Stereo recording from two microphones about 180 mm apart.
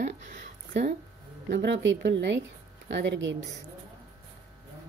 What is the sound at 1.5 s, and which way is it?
A woman's voice, 70° right (ahead or behind).